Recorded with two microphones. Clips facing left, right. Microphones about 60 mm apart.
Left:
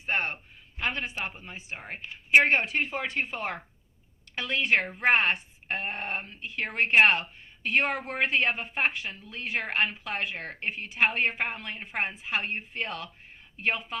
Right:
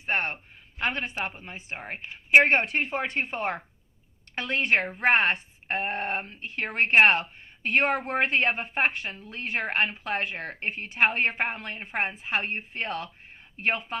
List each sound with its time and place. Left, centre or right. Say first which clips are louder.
0.0 s a sound: right 1 dB; right
0.8 s speech: right 2 dB; right
2.5 s speech: right 2 dB; right